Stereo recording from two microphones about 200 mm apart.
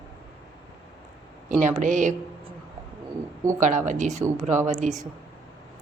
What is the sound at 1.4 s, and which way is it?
Speech, 40° right (ahead or behind).